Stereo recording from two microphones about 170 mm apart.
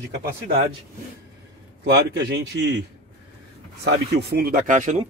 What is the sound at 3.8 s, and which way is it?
Speech, 70° right (ahead or behind).